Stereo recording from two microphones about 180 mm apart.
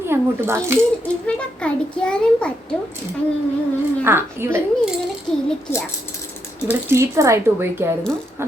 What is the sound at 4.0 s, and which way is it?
Speech, 15° right (ahead or behind).